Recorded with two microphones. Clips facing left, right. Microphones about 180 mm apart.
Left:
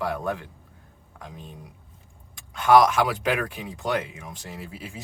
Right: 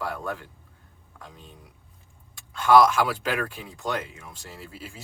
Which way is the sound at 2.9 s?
20° left (ahead or behind).